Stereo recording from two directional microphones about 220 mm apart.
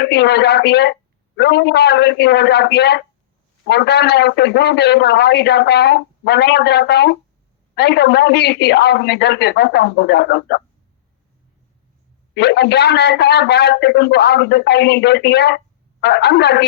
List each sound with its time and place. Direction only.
0.0 s a man's voice: 50° left (ahead or behind)
12.3 s a man's voice: 50° left (ahead or behind)